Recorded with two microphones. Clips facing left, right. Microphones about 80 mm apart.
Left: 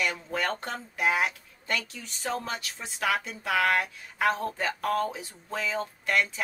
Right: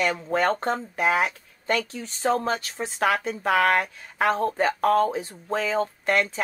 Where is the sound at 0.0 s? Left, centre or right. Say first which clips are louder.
Right 7 dB; right.